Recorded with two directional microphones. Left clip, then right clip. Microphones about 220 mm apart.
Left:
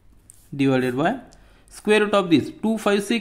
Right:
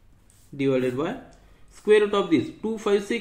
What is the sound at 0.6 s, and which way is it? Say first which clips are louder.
Speech: left 3 dB; 55° left (ahead or behind).